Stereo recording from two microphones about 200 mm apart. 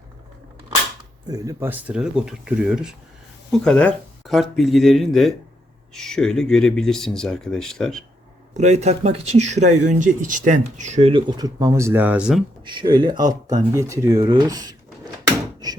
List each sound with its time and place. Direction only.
1.3 s speech: 15° right (ahead or behind); by 8.0 s centre (ahead or behind)
8.5 s speech: 35° right (ahead or behind)
11.3 s speech: 20° right (ahead or behind)
12.6 s speech: 20° right (ahead or behind)